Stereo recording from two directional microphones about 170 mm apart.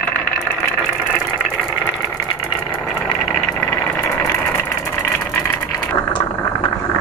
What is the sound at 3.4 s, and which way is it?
Vehicle, 10° left (ahead or behind).